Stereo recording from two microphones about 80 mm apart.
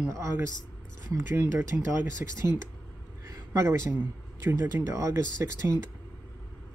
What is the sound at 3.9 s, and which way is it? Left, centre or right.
Speech, right.